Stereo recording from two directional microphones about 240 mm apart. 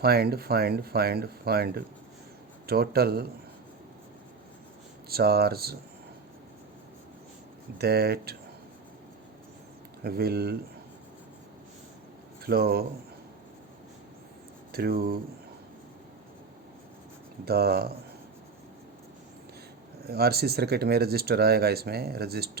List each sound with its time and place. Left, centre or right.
0.0 s speech: right
5.0 s speech: right
7.8 s speech: right
10.0 s speech: right
12.4 s speech: right
14.7 s speech: right
17.4 s speech: right
20.1 s speech: right